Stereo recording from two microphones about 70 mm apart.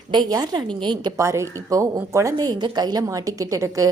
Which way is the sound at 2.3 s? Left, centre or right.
Right.